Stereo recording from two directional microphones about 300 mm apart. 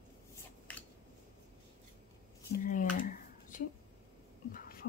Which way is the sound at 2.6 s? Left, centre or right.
Left.